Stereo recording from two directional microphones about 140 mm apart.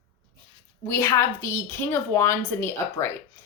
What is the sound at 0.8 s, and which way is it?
A woman's voice, 20° left (ahead or behind).